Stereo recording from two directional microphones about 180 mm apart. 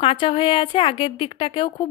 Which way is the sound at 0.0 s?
30° left (ahead or behind).